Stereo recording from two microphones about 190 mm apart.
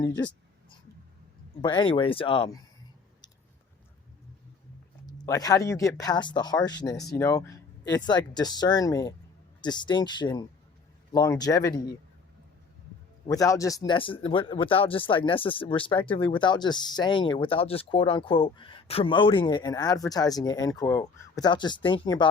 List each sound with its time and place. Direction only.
1.6 s speech: 25° left (ahead or behind)
5.0 s speech: 20° left (ahead or behind)
13.2 s speech: 15° left (ahead or behind)